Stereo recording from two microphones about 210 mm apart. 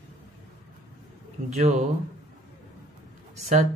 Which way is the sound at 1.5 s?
30° right (ahead or behind).